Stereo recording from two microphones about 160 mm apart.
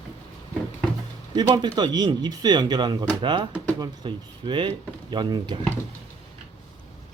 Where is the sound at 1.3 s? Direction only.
25° right (ahead or behind).